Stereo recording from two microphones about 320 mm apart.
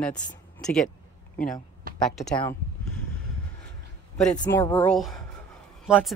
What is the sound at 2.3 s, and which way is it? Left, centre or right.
Speech, centre.